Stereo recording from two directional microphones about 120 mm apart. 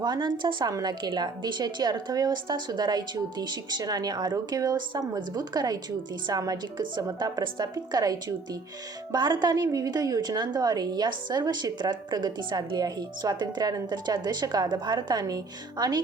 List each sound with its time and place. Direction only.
0.0 s a woman's voice: 35° right (ahead or behind)